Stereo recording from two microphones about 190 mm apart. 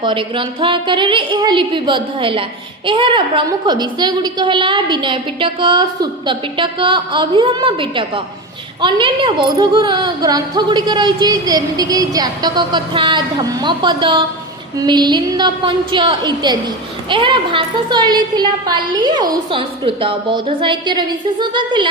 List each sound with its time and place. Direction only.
0.0 s a woman's voice: 25° right (ahead or behind)